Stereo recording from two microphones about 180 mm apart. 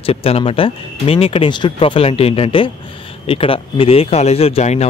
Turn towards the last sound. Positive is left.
turn(degrees=35)  # may be behind; listen again after turning